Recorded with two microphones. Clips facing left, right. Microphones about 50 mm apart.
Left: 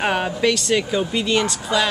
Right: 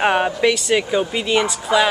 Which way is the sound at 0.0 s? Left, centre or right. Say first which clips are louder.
Right 3 dB; centre.